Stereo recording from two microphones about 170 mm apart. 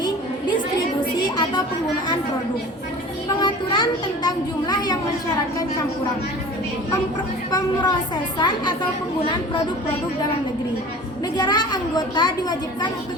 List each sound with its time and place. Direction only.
1.1 s music: 25° left (ahead or behind)
3.2 s a child's voice: 25° left (ahead or behind)
7.5 s a woman's voice: 25° left (ahead or behind)
11.3 s a woman's voice: 25° left (ahead or behind)